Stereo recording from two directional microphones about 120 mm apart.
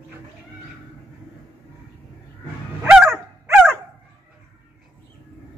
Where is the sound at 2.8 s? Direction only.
5° right (ahead or behind).